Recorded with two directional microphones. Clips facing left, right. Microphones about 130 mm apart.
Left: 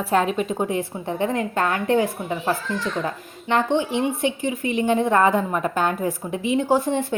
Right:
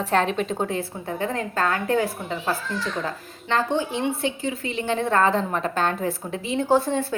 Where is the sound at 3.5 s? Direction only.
20° left (ahead or behind).